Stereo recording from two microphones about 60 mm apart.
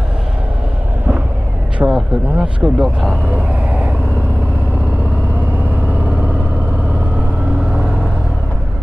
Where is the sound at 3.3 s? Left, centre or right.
Right.